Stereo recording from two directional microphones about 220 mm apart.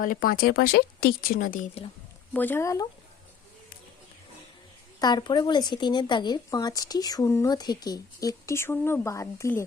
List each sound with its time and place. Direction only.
0.0 s speech: 40° left (ahead or behind)
2.3 s speech: 10° left (ahead or behind)
4.9 s speech: 20° left (ahead or behind)